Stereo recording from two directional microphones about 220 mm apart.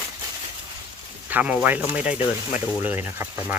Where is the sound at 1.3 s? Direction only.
5° right (ahead or behind).